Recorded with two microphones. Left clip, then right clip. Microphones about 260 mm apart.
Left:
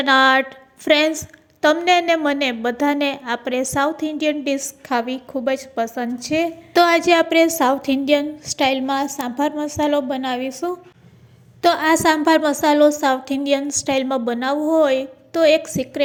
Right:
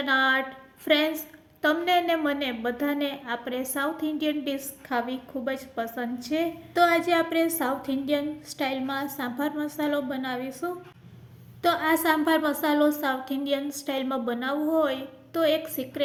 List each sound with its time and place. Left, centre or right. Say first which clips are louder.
0.0 s a woman's voice: left 9 dB; left